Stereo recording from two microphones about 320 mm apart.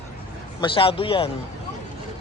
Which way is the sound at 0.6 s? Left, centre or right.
Centre.